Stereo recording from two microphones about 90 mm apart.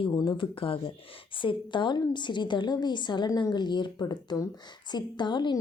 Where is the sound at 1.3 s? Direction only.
70° left (ahead or behind).